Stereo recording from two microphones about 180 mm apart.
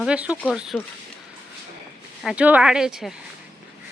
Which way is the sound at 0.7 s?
10° left (ahead or behind).